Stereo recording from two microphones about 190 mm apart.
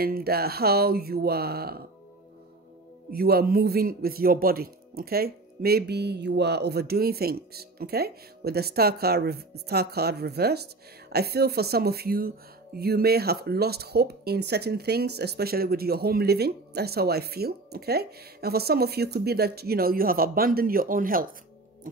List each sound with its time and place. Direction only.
0.0 s a man's voice: 55° right (ahead or behind)
3.1 s a man's voice: 55° right (ahead or behind)
21.8 s music: 45° right (ahead or behind)